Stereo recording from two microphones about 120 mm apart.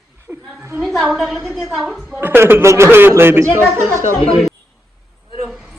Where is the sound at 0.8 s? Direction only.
Centre (ahead or behind).